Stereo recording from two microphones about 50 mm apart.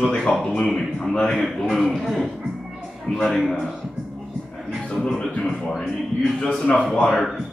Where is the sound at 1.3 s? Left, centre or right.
Centre.